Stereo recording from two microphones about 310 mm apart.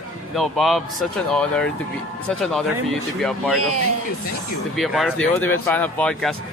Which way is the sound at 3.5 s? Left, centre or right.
Right.